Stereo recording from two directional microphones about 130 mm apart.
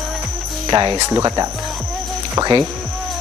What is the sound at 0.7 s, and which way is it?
Speech, 30° right (ahead or behind).